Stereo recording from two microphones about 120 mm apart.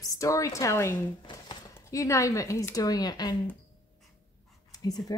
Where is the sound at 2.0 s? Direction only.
25° left (ahead or behind).